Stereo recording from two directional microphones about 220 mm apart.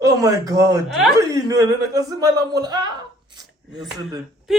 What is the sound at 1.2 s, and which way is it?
Speech, 15° right (ahead or behind).